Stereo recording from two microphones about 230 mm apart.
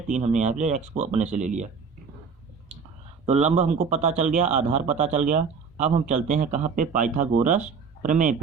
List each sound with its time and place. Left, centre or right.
0.1 s speech: right
3.2 s speech: right